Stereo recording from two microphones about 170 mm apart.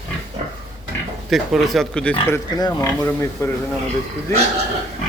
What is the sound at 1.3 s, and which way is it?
Speech, centre (ahead or behind).